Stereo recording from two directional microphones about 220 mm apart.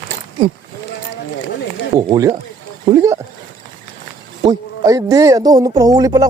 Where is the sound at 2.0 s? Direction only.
15° right (ahead or behind).